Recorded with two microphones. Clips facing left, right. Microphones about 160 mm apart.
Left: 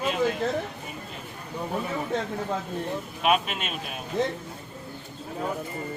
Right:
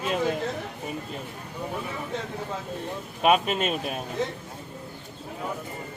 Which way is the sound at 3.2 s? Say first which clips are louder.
Right 4 dB; 40° right (ahead or behind).